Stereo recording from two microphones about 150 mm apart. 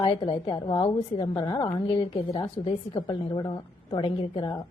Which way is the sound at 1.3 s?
25° left (ahead or behind).